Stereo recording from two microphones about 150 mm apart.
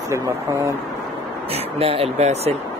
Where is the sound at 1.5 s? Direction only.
40° right (ahead or behind).